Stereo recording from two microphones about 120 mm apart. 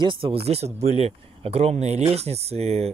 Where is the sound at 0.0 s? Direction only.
45° right (ahead or behind).